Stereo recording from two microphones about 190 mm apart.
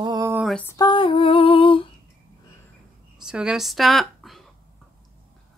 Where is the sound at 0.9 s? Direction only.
30° left (ahead or behind).